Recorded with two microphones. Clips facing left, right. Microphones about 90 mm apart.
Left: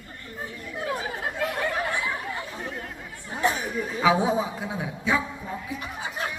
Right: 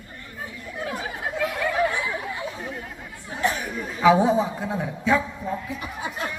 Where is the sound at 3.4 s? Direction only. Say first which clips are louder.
Even; 5° left (ahead or behind).